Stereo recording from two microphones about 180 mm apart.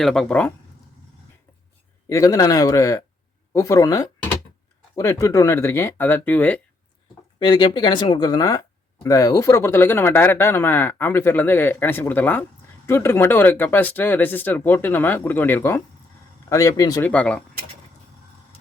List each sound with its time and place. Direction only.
0.0 s speech: centre (ahead or behind)
2.0 s speech: 15° left (ahead or behind)
7.3 s speech: 25° left (ahead or behind)
17.0 s speech: 5° left (ahead or behind)